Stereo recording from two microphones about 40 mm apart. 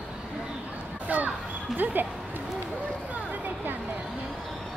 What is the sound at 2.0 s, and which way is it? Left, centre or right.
Speech, right.